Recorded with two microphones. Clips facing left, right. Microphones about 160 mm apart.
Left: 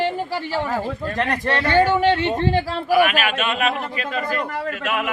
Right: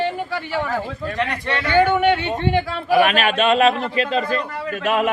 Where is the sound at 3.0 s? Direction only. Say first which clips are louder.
Right 3 dB; 35° right (ahead or behind).